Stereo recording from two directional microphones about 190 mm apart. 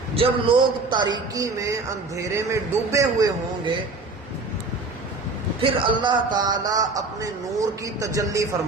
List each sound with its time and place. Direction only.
0.1 s a man's voice: 25° right (ahead or behind)
5.8 s a man's voice: 25° right (ahead or behind)